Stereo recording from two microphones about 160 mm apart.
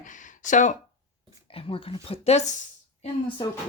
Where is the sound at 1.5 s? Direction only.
35° left (ahead or behind).